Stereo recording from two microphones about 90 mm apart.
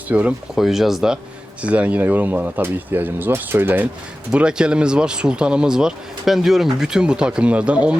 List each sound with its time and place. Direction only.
0.1 s speech: 15° right (ahead or behind)
0.5 s speech: 5° right (ahead or behind); by 3.8 s 25° right (ahead or behind)
4.3 s speech: 10° right (ahead or behind)